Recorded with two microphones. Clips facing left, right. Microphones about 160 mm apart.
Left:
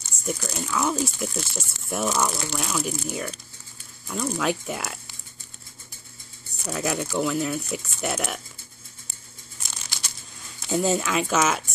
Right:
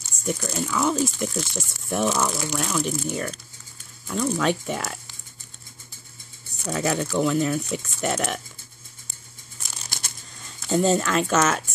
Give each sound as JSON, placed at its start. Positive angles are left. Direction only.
{"t": 0.0, "sound": "speech", "side_deg": 0}
{"t": 6.7, "sound": "speech", "side_deg": 0}
{"t": 9.8, "sound": "a sound", "side_deg": -50}
{"t": 10.7, "sound": "speech", "side_deg": 5}